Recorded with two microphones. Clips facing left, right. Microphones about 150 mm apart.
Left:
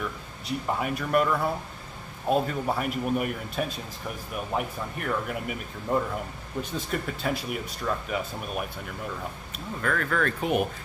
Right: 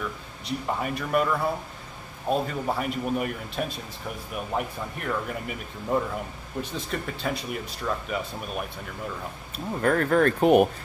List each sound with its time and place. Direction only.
0.5 s speech: centre (ahead or behind)
9.8 s speech: 40° right (ahead or behind)
10.4 s speech: 50° right (ahead or behind)